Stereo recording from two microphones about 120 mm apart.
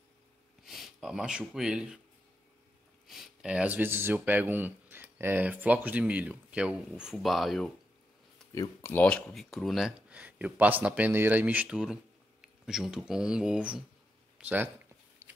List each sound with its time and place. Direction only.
0.7 s speech: centre (ahead or behind)
3.1 s speech: 5° right (ahead or behind)
8.4 s a sound: 5° left (ahead or behind)
8.9 s speech: 10° left (ahead or behind); by 14.7 s 15° right (ahead or behind)
15.2 s biting: 25° right (ahead or behind)